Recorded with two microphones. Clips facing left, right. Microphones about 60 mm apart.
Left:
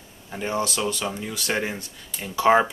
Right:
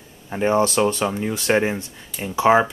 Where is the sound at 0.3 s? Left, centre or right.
Right.